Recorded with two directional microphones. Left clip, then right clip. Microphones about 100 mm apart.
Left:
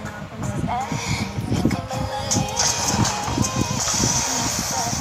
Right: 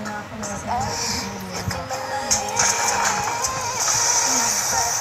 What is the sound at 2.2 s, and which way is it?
Music, 55° left (ahead or behind).